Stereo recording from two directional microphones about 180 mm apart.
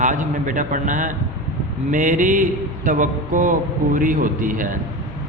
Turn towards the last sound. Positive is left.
turn(degrees=-50)  # may be behind; listen again after turning